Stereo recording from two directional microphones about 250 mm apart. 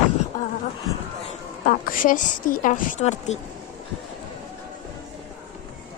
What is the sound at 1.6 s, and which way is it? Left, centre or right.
A woman's voice, left.